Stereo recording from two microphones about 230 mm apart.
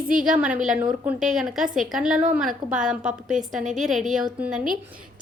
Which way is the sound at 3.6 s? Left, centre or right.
Right.